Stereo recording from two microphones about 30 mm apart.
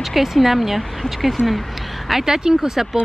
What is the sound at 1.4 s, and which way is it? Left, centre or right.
Speech, left.